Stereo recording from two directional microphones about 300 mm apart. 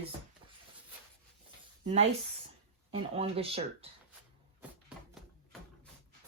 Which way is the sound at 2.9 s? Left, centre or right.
Centre.